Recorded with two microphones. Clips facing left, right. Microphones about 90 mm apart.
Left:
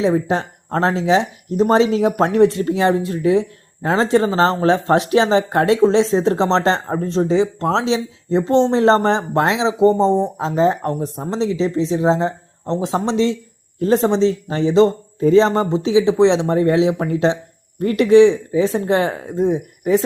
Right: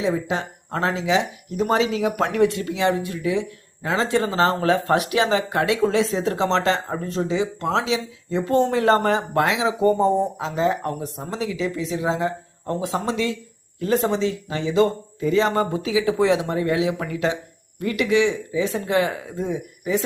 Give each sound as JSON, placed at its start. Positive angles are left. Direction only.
{"t": 0.0, "sound": "speech", "side_deg": 35}
{"t": 10.3, "sound": "speech", "side_deg": 35}